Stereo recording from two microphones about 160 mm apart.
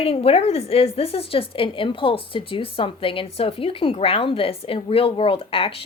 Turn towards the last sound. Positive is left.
turn(degrees=35)  # may be behind; listen again after turning